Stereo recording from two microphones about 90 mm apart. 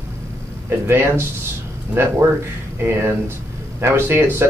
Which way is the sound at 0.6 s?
25° right (ahead or behind).